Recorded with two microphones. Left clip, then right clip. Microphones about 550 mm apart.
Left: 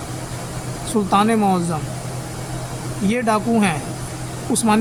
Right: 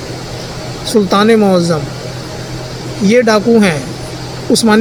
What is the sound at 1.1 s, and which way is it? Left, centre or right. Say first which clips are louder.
Speech: right 6 dB; left.